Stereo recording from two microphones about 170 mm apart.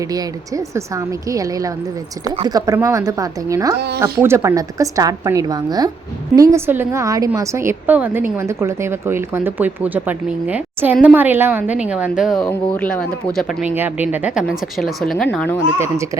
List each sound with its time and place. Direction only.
0.1 s a woman's voice: 20° right (ahead or behind)
3.8 s speech: 75° right (ahead or behind)
4.2 s a woman's voice: 15° right (ahead or behind)
12.5 s a woman's voice: 10° left (ahead or behind)
13.7 s a woman's voice: 10° right (ahead or behind); by 15.5 s 5° left (ahead or behind)